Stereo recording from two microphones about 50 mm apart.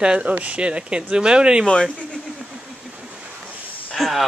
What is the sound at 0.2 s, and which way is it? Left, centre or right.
Speech, right.